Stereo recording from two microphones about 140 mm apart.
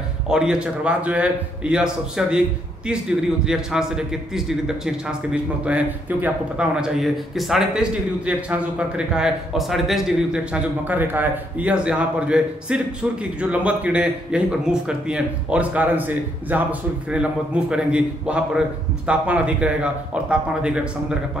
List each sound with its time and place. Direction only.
0.3 s a man's voice: 5° right (ahead or behind)